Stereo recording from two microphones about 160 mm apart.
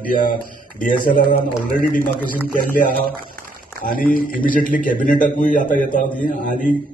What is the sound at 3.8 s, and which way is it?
A man's voice, 65° left (ahead or behind).